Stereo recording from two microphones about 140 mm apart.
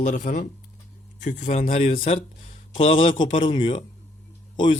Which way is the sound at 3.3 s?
35° left (ahead or behind).